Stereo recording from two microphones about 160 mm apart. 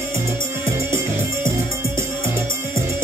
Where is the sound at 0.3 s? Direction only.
15° right (ahead or behind).